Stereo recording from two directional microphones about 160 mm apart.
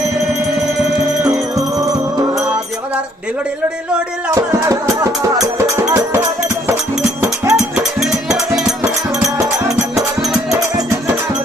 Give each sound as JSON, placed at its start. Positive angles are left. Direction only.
{"t": 1.5, "sound": "music", "side_deg": -20}
{"t": 4.4, "sound": "speech", "side_deg": -20}
{"t": 7.5, "sound": "music", "side_deg": 0}